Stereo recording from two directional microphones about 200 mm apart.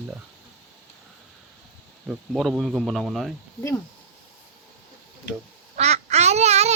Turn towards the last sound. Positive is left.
turn(degrees=-35)  # may be behind; listen again after turning